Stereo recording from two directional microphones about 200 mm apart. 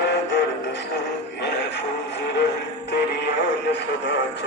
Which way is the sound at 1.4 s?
60° left (ahead or behind).